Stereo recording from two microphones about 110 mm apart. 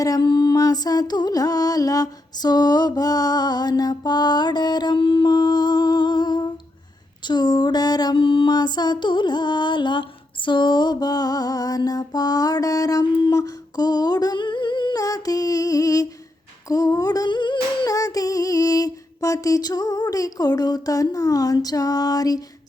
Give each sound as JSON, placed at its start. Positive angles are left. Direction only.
{"t": 0.2, "sound": "mantra", "side_deg": 45}
{"t": 13.3, "sound": "humming", "side_deg": 35}
{"t": 14.9, "sound": "a sound", "side_deg": 35}
{"t": 16.6, "sound": "female singing", "side_deg": 30}
{"t": 17.9, "sound": "music", "side_deg": 35}